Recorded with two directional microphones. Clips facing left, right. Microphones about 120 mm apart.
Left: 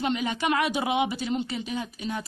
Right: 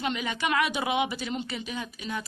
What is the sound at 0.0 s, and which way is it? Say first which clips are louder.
A woman's voice: left 3 dB; 30° left (ahead or behind).